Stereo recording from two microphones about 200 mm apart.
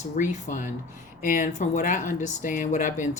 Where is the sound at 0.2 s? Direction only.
40° left (ahead or behind).